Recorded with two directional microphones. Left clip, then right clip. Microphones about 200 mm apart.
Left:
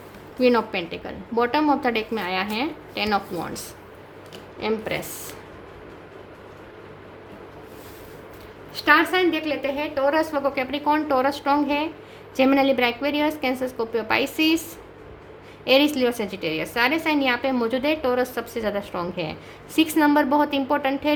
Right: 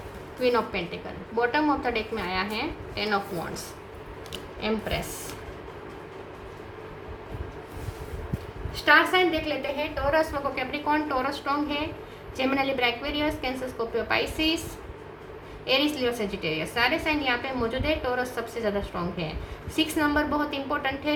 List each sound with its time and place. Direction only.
0.3 s a woman's voice: 55° left (ahead or behind)
8.7 s a woman's voice: 55° left (ahead or behind)
15.6 s a woman's voice: 55° left (ahead or behind)